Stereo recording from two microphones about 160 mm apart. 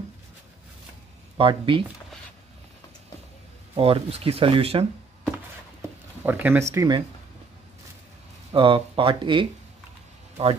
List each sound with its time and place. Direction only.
1.4 s speech: 30° right (ahead or behind)
3.7 s speech: 35° right (ahead or behind)
6.2 s speech: 10° right (ahead or behind)
8.5 s speech: 35° right (ahead or behind)